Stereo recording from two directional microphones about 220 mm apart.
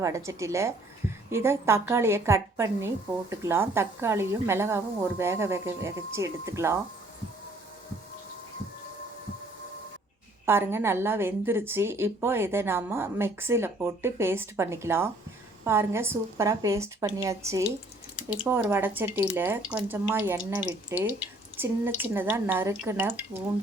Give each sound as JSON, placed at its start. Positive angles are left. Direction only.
{"t": 0.0, "sound": "a woman's voice", "side_deg": -15}
{"t": 10.4, "sound": "a woman's voice", "side_deg": -10}